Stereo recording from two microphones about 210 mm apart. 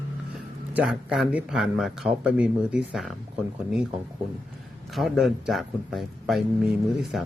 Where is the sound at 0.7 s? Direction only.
5° right (ahead or behind).